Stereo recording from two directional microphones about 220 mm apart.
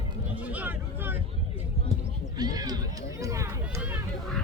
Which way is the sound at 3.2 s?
15° right (ahead or behind).